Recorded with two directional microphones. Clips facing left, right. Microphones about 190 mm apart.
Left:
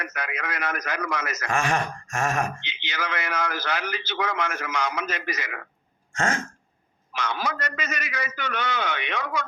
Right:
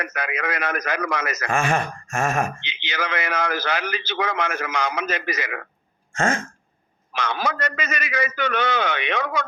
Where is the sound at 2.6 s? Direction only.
90° right.